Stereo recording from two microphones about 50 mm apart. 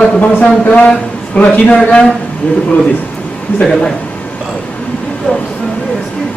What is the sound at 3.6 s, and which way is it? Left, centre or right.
Speech, centre.